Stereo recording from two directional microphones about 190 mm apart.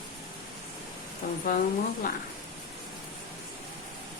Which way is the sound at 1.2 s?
45° left (ahead or behind).